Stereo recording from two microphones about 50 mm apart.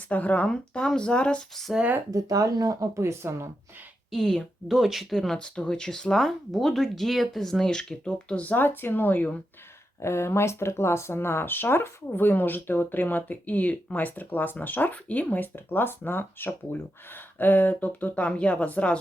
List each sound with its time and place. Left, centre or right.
0.1 s speech: left
0.4 s speech: centre
2.9 s speech: right
4.1 s speech: centre
4.7 s speech: centre
5.1 s speech: centre
7.6 s speech: centre
8.4 s speech: left
10.0 s speech: left
18.1 s speech: left